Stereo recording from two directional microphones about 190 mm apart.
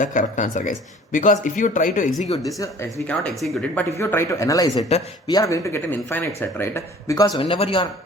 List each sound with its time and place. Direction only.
0.0 s speech: 40° left (ahead or behind)
2.6 s speech: 15° left (ahead or behind)
3.2 s speech: 5° left (ahead or behind); by 7.9 s 25° left (ahead or behind)